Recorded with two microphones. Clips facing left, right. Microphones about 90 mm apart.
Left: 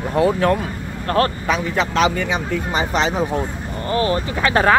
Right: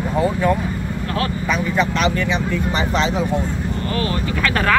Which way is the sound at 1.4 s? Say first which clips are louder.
Right 1 dB; 70° left (ahead or behind).